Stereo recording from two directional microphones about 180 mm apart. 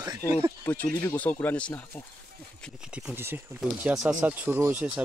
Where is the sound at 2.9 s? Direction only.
10° right (ahead or behind).